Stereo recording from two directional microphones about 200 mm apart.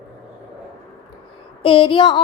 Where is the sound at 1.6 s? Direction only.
25° left (ahead or behind).